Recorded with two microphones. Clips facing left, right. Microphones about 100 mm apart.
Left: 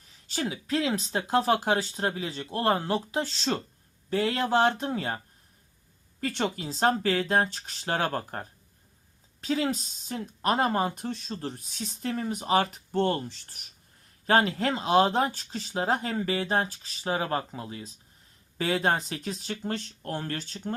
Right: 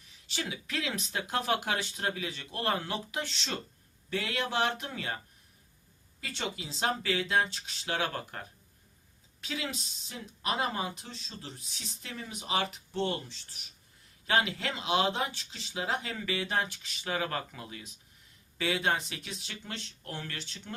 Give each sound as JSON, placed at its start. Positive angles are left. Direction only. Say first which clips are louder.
{"t": 0.0, "sound": "speech", "louder": "left 6 dB", "side_deg": 40}
{"t": 6.1, "sound": "speech", "louder": "left 8 dB", "side_deg": 50}